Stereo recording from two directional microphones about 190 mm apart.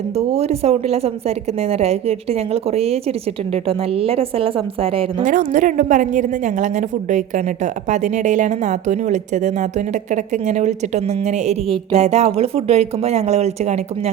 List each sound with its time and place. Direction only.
0.2 s a woman's voice: 35° right (ahead or behind)
5.2 s a woman's voice: 40° right (ahead or behind)